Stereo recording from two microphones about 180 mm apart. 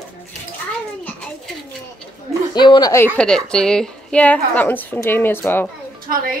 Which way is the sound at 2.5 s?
25° left (ahead or behind).